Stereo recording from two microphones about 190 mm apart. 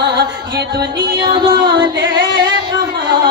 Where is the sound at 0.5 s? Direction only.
60° right (ahead or behind).